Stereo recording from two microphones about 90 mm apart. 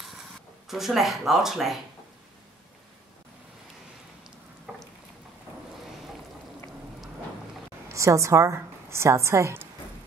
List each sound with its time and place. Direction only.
0.7 s speech: 5° right (ahead or behind)
7.9 s a woman's voice: 35° right (ahead or behind)